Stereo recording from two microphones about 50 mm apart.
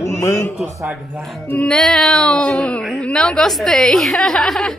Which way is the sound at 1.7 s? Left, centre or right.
Centre.